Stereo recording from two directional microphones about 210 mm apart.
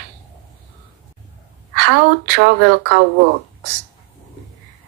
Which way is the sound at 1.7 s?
55° right (ahead or behind).